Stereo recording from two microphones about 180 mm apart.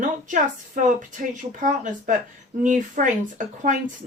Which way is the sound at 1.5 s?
45° right (ahead or behind).